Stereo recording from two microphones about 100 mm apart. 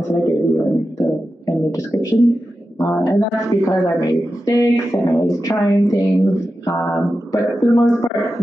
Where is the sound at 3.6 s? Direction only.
35° left (ahead or behind).